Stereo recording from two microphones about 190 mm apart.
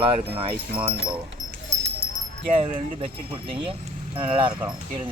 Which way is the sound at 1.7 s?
40° right (ahead or behind).